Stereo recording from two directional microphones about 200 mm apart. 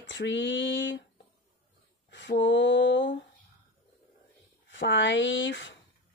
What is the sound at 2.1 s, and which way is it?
Speech, 65° left (ahead or behind).